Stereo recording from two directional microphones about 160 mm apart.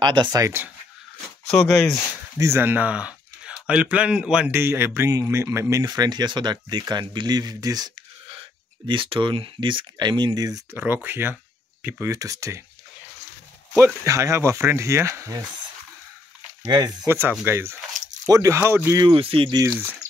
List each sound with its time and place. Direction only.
0.0 s speech: 30° right (ahead or behind)
2.3 s speech: 15° right (ahead or behind)
10.8 s speech: 10° right (ahead or behind)
13.7 s speech: 15° right (ahead or behind)
16.6 s speech: 25° right (ahead or behind)
19.0 s speech: 35° right (ahead or behind)